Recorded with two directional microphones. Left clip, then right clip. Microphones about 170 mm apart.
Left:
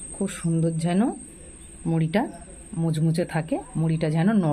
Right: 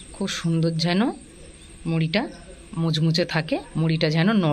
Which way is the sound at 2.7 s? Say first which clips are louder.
Right 3 dB; centre (ahead or behind).